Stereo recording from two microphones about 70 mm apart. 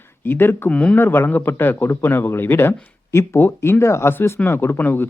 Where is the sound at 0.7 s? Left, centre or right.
Centre.